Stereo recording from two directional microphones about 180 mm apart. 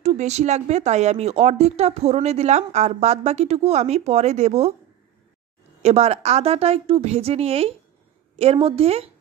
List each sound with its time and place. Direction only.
0.0 s speech: 40° right (ahead or behind)
5.8 s speech: 35° right (ahead or behind)